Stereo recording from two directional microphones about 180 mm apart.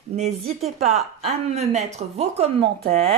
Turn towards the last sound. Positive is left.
turn(degrees=-55)  # may be behind; listen again after turning